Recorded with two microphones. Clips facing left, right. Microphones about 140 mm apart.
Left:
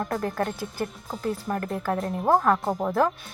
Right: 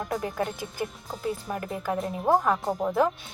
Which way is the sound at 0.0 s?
5° right (ahead or behind).